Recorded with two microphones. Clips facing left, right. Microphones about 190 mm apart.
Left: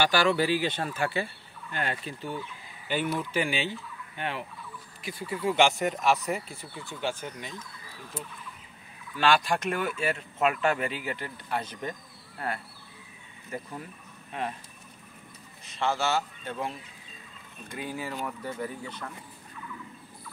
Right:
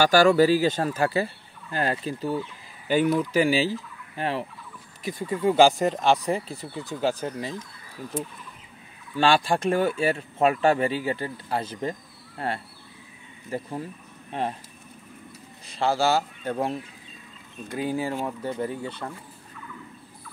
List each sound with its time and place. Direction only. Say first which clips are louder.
0.0 s speech: right 7 dB; 45° right (ahead or behind)
9.1 s speech: right 3 dB; 30° right (ahead or behind)
15.6 s speech: right 5 dB; 35° right (ahead or behind)